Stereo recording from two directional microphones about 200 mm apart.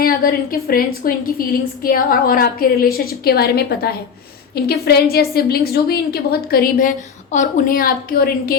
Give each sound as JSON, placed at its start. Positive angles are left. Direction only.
{"t": 0.0, "sound": "a woman's voice", "side_deg": 45}